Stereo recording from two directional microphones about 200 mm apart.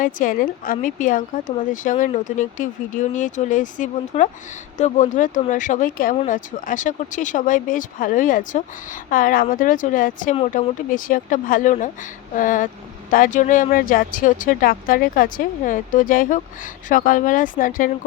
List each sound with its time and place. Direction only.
0.0 s speech: 40° left (ahead or behind)
10.3 s speech: 30° left (ahead or behind)